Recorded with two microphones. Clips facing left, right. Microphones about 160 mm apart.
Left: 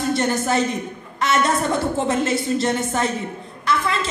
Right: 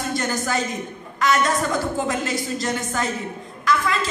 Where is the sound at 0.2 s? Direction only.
25° left (ahead or behind).